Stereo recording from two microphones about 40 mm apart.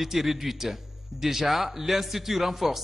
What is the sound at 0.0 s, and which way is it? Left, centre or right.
A man's voice, centre.